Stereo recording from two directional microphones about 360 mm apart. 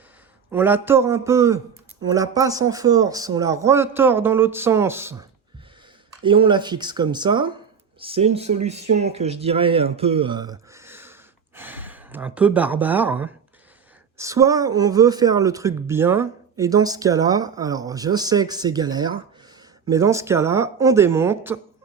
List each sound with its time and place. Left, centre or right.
0.5 s speech: centre
6.2 s speech: centre